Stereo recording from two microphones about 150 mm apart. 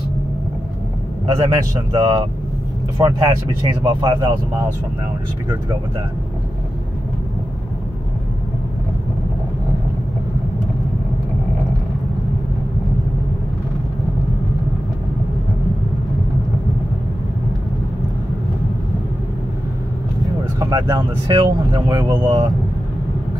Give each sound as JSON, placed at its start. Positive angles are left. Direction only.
{"t": 1.2, "sound": "speech", "side_deg": -25}
{"t": 20.5, "sound": "speech", "side_deg": -20}